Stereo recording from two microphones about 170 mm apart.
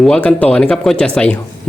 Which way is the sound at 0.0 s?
5° left (ahead or behind).